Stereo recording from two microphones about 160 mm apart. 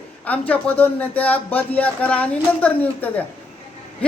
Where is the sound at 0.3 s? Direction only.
10° left (ahead or behind).